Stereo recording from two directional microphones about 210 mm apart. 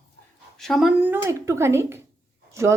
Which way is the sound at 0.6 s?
Centre (ahead or behind).